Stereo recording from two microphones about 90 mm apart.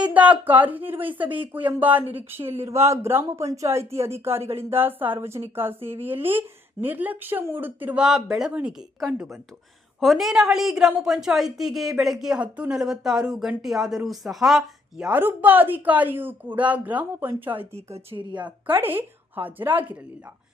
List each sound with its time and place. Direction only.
0.0 s speech: 15° right (ahead or behind)
8.0 s a woman's voice: 5° right (ahead or behind)
15.1 s speech: 20° right (ahead or behind)
18.1 s a woman's voice: 65° right (ahead or behind)
18.7 s speech: 25° right (ahead or behind)